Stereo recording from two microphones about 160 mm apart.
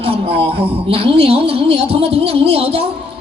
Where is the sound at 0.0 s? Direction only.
35° right (ahead or behind).